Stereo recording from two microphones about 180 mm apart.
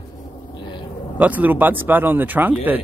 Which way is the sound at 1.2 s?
10° right (ahead or behind).